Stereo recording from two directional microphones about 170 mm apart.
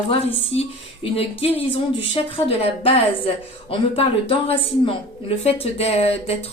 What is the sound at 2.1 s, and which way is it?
Speech, 35° left (ahead or behind).